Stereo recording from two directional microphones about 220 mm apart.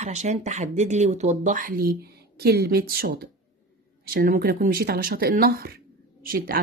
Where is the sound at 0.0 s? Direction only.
30° right (ahead or behind).